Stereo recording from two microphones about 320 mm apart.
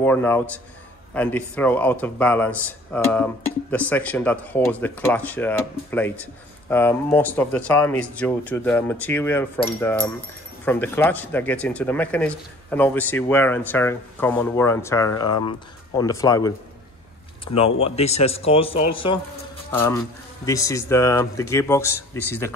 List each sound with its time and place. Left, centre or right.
0.0 s speech: centre
17.7 s a man's voice: centre
20.4 s speech: centre